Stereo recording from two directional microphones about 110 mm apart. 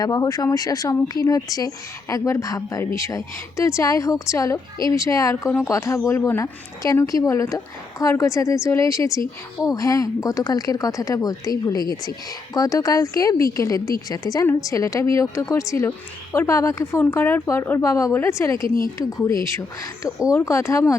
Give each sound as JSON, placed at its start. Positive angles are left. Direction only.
{"t": 0.0, "sound": "a woman's voice", "side_deg": 35}
{"t": 17.0, "sound": "speech", "side_deg": 15}